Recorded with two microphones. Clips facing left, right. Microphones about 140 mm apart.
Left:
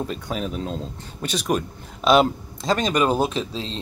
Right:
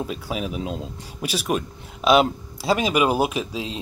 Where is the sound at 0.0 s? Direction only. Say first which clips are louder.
Even; 5° right (ahead or behind).